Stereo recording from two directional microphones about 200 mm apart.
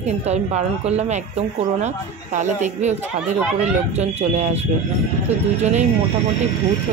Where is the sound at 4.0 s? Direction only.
35° right (ahead or behind).